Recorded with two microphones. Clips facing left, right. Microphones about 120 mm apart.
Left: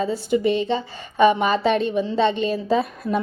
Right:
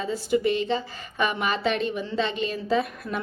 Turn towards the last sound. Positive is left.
turn(degrees=40)  # may be behind; listen again after turning